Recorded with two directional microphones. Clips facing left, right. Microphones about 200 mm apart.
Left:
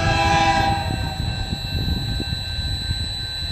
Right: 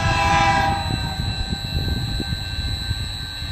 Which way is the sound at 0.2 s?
35° left (ahead or behind).